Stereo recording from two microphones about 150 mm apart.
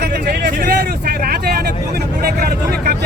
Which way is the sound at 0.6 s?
85° right.